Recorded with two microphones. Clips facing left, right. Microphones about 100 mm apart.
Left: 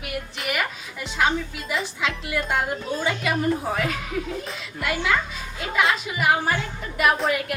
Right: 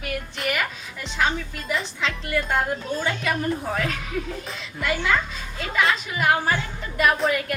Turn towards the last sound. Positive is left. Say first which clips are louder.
# even
turn(degrees=0)  # may be behind; listen again after turning